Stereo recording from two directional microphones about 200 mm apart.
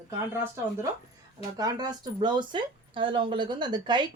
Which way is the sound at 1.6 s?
20° right (ahead or behind).